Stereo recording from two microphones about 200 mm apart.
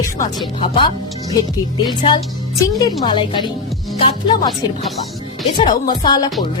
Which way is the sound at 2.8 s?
20° left (ahead or behind).